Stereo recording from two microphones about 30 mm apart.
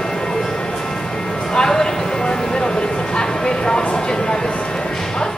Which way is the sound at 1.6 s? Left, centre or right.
Centre.